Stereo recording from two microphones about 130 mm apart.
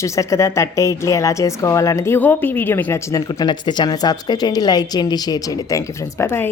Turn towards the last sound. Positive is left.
turn(degrees=20)  # may be behind; listen again after turning